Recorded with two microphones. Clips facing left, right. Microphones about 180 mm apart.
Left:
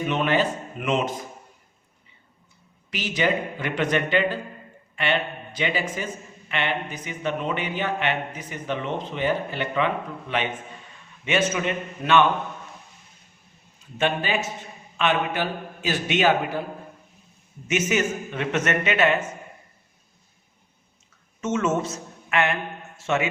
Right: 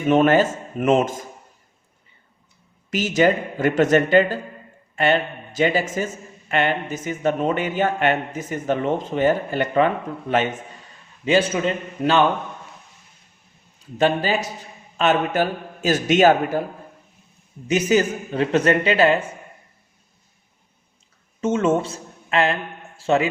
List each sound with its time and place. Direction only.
0.1 s speech: 45° right (ahead or behind)
2.9 s a man's voice: 45° right (ahead or behind)
11.3 s a man's voice: 30° right (ahead or behind)
14.0 s a man's voice: 40° right (ahead or behind)
17.7 s a man's voice: 35° right (ahead or behind)
21.4 s a man's voice: 30° right (ahead or behind)